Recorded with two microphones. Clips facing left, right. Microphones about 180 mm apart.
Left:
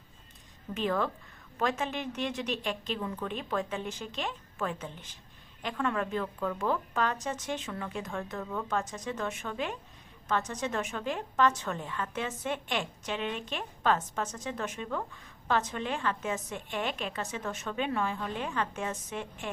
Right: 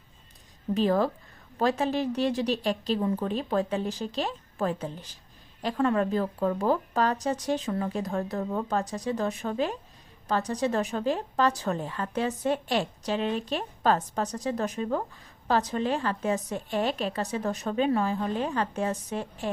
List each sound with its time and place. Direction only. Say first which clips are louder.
0.7 s a woman's voice: right 6 dB; 35° right (ahead or behind)